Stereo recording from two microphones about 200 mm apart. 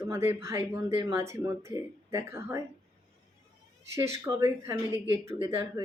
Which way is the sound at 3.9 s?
15° right (ahead or behind).